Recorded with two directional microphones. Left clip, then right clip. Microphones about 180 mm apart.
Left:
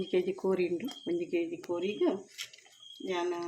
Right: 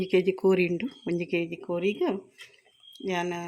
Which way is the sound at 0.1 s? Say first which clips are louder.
Right 8 dB; 65° right (ahead or behind).